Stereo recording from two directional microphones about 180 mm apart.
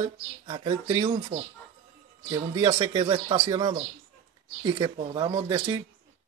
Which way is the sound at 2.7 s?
25° right (ahead or behind).